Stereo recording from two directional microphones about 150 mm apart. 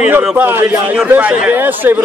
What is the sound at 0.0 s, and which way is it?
A man's voice, 15° right (ahead or behind).